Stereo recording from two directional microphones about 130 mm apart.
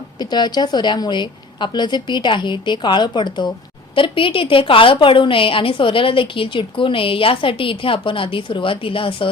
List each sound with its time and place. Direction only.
0.2 s a woman's voice: 35° left (ahead or behind)